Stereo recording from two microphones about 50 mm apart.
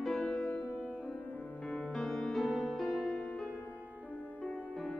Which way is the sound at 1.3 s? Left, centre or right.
Left.